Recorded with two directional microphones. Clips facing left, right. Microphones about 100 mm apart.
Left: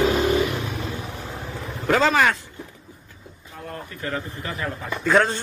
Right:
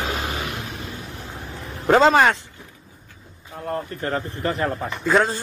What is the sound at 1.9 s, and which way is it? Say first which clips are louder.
Speech: right 4 dB; 30° right (ahead or behind).